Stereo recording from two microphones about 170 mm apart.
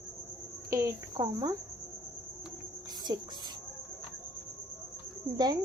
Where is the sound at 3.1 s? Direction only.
25° right (ahead or behind).